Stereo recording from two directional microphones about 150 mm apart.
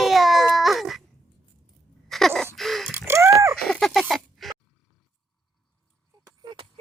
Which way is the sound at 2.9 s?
15° right (ahead or behind).